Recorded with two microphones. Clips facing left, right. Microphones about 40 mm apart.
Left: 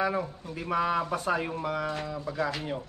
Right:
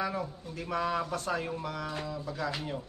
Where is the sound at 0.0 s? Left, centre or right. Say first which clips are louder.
Left 5 dB; centre.